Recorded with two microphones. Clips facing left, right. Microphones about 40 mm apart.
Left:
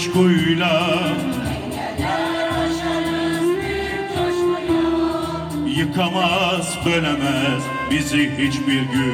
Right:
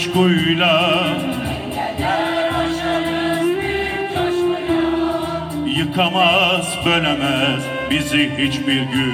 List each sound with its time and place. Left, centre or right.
0.1 s music: right